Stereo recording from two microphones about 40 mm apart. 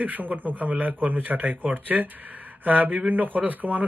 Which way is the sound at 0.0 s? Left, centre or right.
Right.